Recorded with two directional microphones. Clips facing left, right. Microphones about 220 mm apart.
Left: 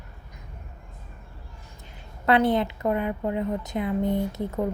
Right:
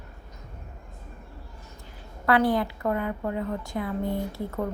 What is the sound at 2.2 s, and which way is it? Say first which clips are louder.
A woman's voice: left 1 dB; 20° left (ahead or behind).